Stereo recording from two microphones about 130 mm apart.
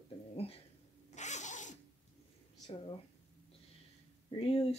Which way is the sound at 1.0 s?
65° left (ahead or behind).